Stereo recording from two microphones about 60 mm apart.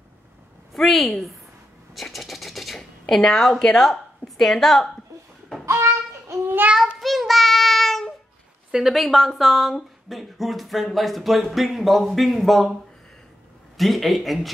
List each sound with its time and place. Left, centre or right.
0.7 s speech: centre
5.7 s child singing: right
7.0 s child singing: centre
8.7 s speech: centre
13.7 s speech: centre